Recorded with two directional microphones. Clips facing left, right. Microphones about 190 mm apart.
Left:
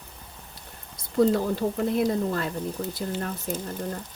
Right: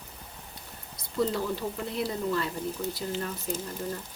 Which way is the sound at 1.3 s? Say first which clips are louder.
Left 6 dB; 50° left (ahead or behind).